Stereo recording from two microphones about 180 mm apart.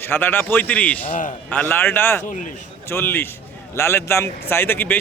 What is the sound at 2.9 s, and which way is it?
Speech, 10° left (ahead or behind).